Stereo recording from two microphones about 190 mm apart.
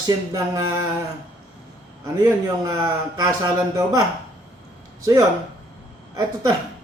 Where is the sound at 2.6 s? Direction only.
20° right (ahead or behind).